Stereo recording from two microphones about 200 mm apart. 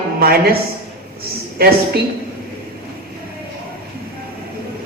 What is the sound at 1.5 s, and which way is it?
Speech, 50° right (ahead or behind).